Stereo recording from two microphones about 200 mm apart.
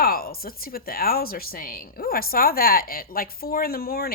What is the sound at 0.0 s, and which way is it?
Speech, 50° left (ahead or behind).